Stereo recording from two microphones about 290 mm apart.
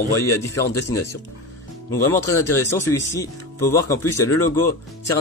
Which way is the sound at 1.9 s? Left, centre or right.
Centre.